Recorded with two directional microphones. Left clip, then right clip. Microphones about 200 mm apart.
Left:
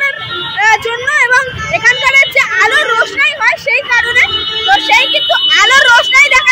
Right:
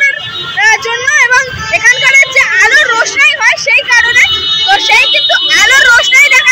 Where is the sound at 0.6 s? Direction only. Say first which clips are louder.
Right 2 dB; 10° left (ahead or behind).